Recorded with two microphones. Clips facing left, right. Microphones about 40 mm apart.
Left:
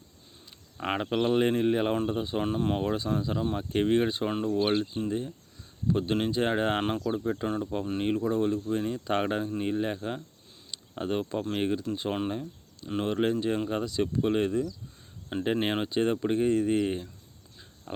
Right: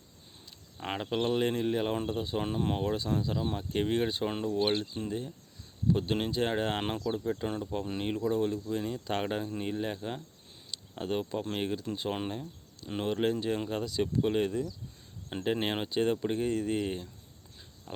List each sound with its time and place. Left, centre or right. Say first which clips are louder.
0.8 s speech: left 4 dB; centre
10.7 s a sound: left 3 dB; centre
11.6 s speech: left 4 dB; centre
12.3 s cricket: left 5 dB; centre
12.9 s speech: left 3 dB; centre
17.9 s speech: left 5 dB; left